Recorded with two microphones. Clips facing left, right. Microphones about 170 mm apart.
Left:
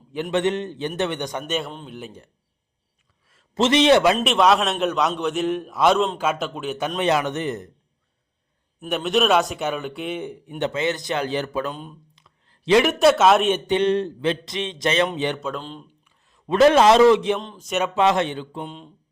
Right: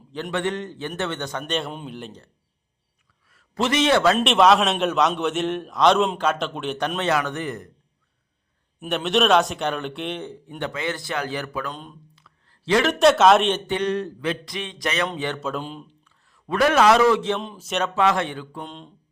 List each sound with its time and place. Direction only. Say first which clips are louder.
0.1 s speech: left 4 dB; 20° left (ahead or behind)
1.5 s a man's voice: even; centre (ahead or behind)
3.2 s a man's voice: left 4 dB; 25° left (ahead or behind)
4.2 s a man's voice: right 1 dB; centre (ahead or behind); by 7.7 s 20° left (ahead or behind)
8.8 s a man's voice: even; centre (ahead or behind); by 11.7 s 25° left (ahead or behind)
11.7 s a man's voice: left 2 dB; 5° left (ahead or behind)
12.1 s a sound: right 1 dB; 20° left (ahead or behind)
12.9 s a man's voice: even; 5° left (ahead or behind)
13.7 s speech: left 4 dB; 25° left (ahead or behind)
15.4 s a man's voice: right 1 dB; 5° right (ahead or behind)
16.0 s a man's voice: left 4 dB; 20° left (ahead or behind)
17.4 s speech: even; 5° right (ahead or behind)
17.9 s speech: left 2 dB; 20° left (ahead or behind)
18.6 s a man's voice: left 2 dB; 5° left (ahead or behind)